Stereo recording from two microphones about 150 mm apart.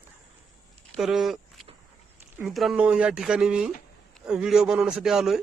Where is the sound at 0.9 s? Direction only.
5° right (ahead or behind).